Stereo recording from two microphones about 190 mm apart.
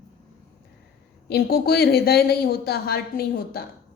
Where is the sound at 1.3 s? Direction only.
55° left (ahead or behind).